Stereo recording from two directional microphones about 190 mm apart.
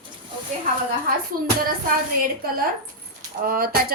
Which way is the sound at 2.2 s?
50° right (ahead or behind).